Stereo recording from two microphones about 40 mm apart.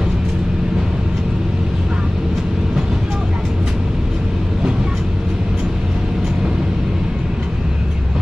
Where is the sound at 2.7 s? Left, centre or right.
Centre.